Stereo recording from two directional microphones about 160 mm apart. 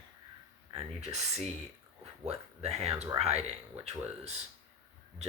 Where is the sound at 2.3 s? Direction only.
40° right (ahead or behind).